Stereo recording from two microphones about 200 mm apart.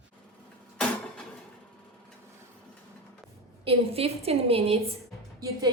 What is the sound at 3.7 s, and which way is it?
A woman's voice, 30° right (ahead or behind).